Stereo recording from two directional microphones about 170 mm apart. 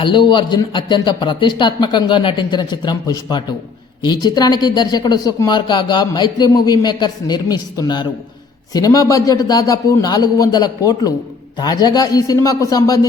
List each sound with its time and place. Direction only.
0.0 s a woman's voice: 30° left (ahead or behind)